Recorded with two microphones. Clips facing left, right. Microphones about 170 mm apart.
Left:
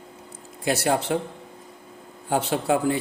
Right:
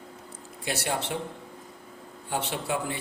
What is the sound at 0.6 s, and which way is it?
Speech, 40° left (ahead or behind).